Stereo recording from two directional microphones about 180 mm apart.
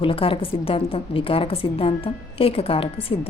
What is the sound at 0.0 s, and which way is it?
A woman's voice, 30° left (ahead or behind).